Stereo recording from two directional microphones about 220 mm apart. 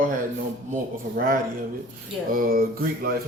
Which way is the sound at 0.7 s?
40° right (ahead or behind).